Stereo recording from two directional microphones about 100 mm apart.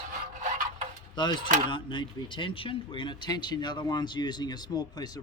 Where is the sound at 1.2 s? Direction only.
55° left (ahead or behind).